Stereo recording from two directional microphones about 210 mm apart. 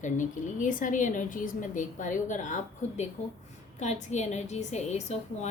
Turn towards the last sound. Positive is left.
turn(degrees=30)  # may be behind; listen again after turning